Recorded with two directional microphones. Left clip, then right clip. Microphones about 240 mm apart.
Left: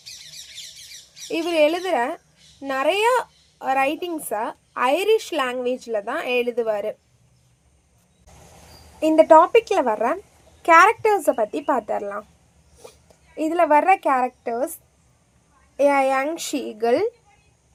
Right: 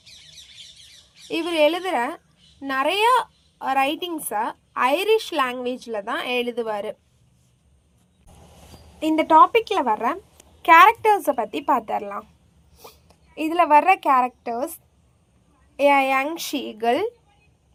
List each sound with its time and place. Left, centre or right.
1.3 s a child's voice: right
9.0 s a child's voice: centre
13.3 s a child's voice: right
15.8 s a child's voice: right